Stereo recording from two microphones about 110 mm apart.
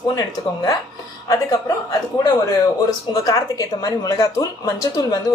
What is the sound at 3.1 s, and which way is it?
Speech, 35° left (ahead or behind).